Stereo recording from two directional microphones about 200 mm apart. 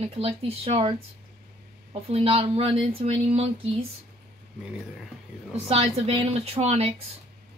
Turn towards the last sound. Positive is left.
turn(degrees=-30)  # may be behind; listen again after turning